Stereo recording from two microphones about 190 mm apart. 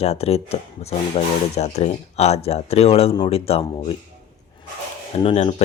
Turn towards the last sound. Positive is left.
turn(degrees=30)  # may be behind; listen again after turning